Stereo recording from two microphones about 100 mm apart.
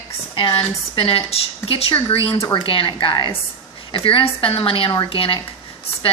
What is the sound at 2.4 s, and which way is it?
A woman's voice, 55° left (ahead or behind).